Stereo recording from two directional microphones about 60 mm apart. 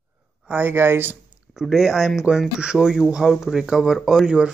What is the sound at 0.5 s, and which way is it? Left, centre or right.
Speech, right.